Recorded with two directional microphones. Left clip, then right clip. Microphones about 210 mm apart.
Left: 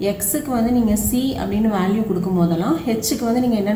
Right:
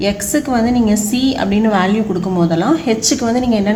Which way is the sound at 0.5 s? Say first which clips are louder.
Right 3 dB; 45° right (ahead or behind).